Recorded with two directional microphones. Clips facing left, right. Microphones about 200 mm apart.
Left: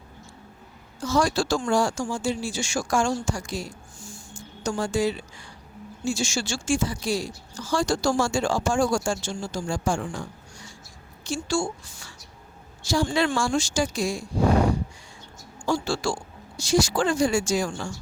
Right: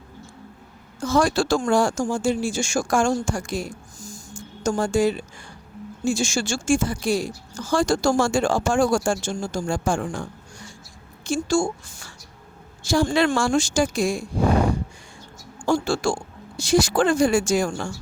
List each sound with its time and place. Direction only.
0.9 s speech: 50° right (ahead or behind)
15.6 s speech: 50° right (ahead or behind)